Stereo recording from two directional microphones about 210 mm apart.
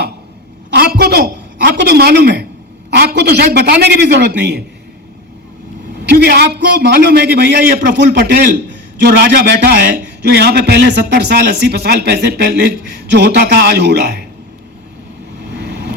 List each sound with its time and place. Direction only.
0.7 s a sound: 50° right (ahead or behind)
2.9 s a man's voice: 50° right (ahead or behind)
6.1 s a man's voice: 50° right (ahead or behind)
15.5 s vehicle: 50° right (ahead or behind)